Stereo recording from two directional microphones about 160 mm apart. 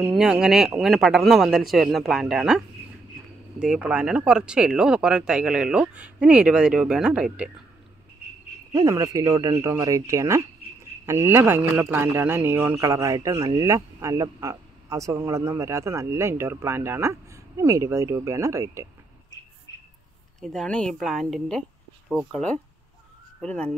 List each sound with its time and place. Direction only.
0.0 s speech: 5° right (ahead or behind)
8.7 s a man's voice: 20° right (ahead or behind)
20.3 s speech: 5° left (ahead or behind)